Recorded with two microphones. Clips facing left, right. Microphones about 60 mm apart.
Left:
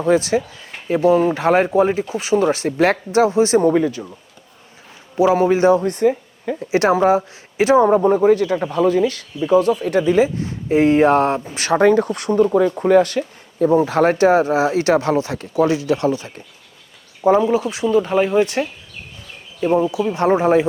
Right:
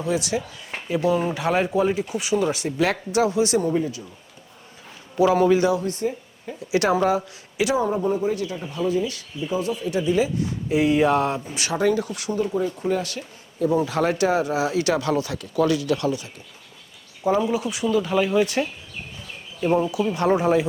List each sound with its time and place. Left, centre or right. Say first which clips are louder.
0.0 s speech: left 8 dB; left
3.6 s speech: left 8 dB; left
5.1 s speech: left 3 dB; left
5.7 s speech: left 8 dB; left
6.7 s speech: left 5 dB; left
19.5 s speech: left 4 dB; left